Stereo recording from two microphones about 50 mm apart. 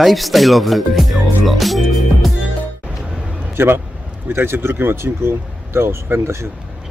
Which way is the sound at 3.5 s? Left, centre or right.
Right.